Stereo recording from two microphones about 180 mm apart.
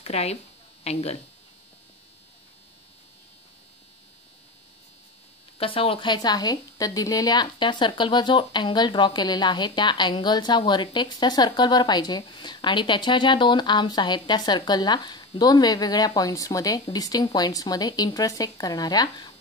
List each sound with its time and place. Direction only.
0.0 s a woman's voice: 35° left (ahead or behind)
5.6 s a woman's voice: 30° left (ahead or behind)